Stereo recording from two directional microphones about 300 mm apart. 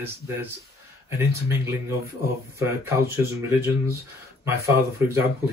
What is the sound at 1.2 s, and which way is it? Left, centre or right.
Speech, centre.